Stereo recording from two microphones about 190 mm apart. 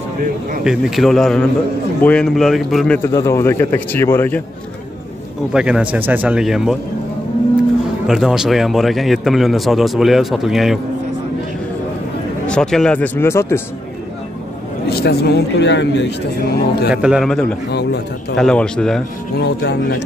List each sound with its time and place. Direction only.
0.7 s a man's voice: centre (ahead or behind)
3.0 s a man's voice: 15° left (ahead or behind)
5.5 s a man's voice: 5° right (ahead or behind)
8.1 s a man's voice: centre (ahead or behind)
12.4 s a man's voice: 5° left (ahead or behind)
14.9 s speech: 55° left (ahead or behind)
16.9 s a man's voice: 5° right (ahead or behind)
19.3 s speech: 70° left (ahead or behind)